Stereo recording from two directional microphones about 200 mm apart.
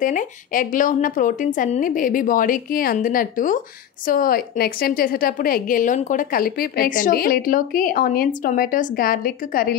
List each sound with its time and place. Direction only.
0.0 s speech: 40° left (ahead or behind)